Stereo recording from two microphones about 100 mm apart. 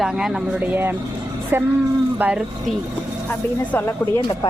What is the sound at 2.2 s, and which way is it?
Speech, 15° right (ahead or behind).